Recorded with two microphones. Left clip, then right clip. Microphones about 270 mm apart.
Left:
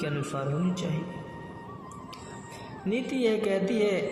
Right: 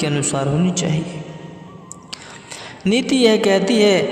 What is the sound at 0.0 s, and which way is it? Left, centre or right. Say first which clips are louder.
Speech: right 11 dB; right.